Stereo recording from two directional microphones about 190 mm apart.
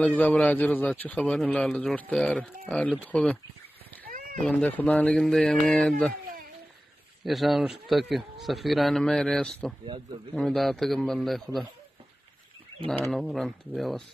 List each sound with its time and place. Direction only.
0.0 s a man's voice: 10° left (ahead or behind)
4.1 s cat: 45° right (ahead or behind)
4.5 s a man's voice: 5° left (ahead or behind)
7.2 s a man's voice: centre (ahead or behind)
13.1 s a man's voice: centre (ahead or behind)